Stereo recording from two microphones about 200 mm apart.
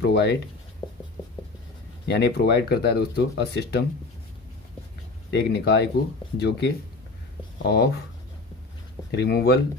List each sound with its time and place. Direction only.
0.0 s speech: 55° left (ahead or behind)
2.0 s speech: 55° left (ahead or behind)
5.3 s speech: 55° left (ahead or behind)
9.1 s speech: 55° left (ahead or behind)